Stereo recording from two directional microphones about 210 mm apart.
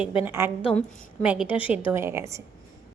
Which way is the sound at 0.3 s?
10° right (ahead or behind).